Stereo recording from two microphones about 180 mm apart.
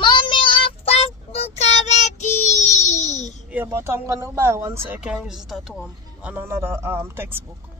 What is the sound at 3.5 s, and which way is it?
Speech, 10° right (ahead or behind).